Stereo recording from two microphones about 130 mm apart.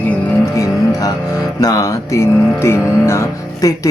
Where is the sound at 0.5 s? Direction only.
25° left (ahead or behind).